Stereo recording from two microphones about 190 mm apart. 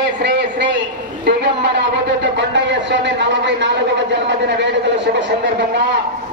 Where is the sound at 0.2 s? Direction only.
65° right (ahead or behind).